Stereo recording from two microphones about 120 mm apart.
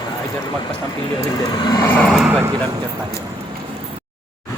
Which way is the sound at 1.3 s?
35° left (ahead or behind).